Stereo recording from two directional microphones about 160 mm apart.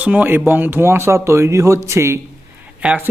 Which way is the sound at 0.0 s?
10° right (ahead or behind).